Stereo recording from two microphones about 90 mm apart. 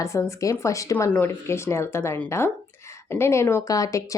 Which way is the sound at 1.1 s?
25° left (ahead or behind).